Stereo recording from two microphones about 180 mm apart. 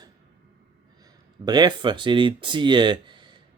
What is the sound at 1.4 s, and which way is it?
Speech, 20° right (ahead or behind).